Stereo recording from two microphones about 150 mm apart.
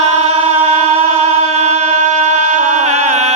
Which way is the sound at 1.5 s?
45° right (ahead or behind).